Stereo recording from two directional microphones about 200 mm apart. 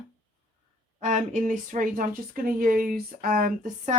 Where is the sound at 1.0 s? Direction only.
35° right (ahead or behind).